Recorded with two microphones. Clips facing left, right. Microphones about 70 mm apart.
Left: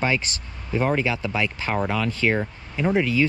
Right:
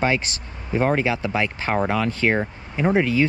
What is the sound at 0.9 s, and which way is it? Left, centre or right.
Speech, right.